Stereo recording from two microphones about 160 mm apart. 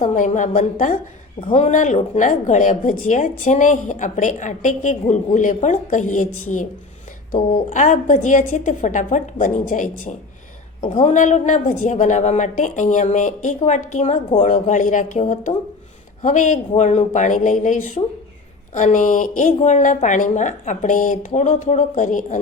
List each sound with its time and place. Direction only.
0.0 s a woman's voice: 50° left (ahead or behind)
7.7 s a woman's voice: 50° left (ahead or behind)
16.2 s a woman's voice: 50° left (ahead or behind)